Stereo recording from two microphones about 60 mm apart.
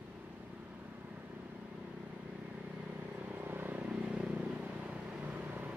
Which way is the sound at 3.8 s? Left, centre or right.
Centre.